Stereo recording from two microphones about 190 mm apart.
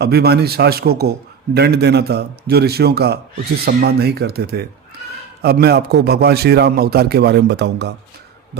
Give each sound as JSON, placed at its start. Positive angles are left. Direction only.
{"t": 0.0, "sound": "a man's voice", "side_deg": -55}